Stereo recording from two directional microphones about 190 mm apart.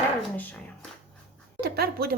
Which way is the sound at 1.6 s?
55° right (ahead or behind).